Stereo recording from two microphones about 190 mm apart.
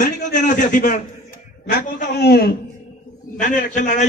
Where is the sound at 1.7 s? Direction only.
55° left (ahead or behind).